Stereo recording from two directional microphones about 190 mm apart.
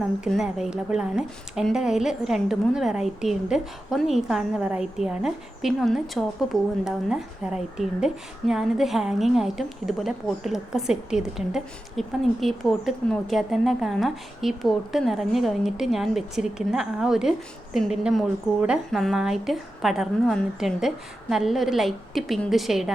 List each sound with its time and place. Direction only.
0.3 s a woman's voice: centre (ahead or behind)